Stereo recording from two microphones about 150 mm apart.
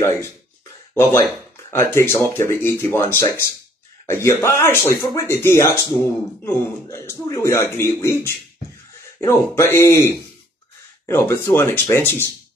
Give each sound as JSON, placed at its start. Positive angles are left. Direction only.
{"t": 1.7, "sound": "a man's voice", "side_deg": 15}